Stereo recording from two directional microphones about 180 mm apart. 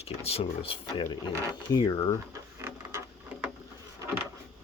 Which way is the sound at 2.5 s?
15° right (ahead or behind).